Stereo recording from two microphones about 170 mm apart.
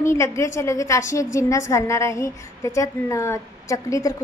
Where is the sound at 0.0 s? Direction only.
15° left (ahead or behind).